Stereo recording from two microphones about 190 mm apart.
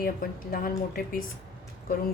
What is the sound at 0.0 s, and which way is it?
A woman's voice, 50° left (ahead or behind).